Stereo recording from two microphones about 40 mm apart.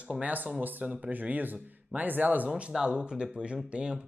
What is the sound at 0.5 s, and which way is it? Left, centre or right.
Speech, right.